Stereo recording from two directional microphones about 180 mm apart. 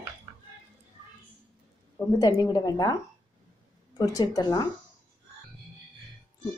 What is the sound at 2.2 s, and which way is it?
A woman's voice, 20° left (ahead or behind).